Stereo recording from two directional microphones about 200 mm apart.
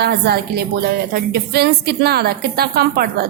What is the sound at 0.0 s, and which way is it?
A woman's voice, 50° right (ahead or behind).